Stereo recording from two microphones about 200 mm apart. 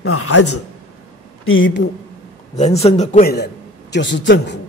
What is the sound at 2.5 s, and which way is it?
Speech, 35° left (ahead or behind).